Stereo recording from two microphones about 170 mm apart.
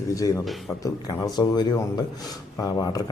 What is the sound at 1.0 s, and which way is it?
A man's voice, 25° left (ahead or behind).